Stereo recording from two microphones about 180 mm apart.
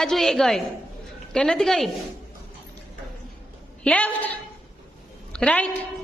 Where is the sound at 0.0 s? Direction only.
Centre (ahead or behind).